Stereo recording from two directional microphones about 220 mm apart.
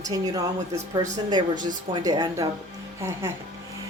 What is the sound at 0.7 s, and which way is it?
Speech, 30° right (ahead or behind).